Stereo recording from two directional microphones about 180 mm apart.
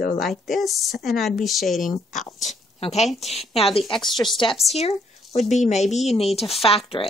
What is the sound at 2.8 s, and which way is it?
Speech, 40° left (ahead or behind).